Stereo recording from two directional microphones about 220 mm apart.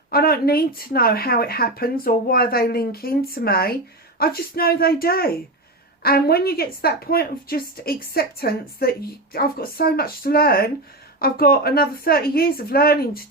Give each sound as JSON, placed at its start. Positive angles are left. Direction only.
{"t": 0.1, "sound": "a woman's voice", "side_deg": 45}